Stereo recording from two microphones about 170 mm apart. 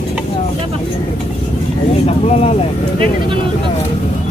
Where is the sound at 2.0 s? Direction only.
35° left (ahead or behind).